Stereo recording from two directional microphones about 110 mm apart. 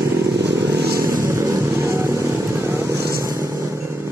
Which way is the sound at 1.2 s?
25° right (ahead or behind).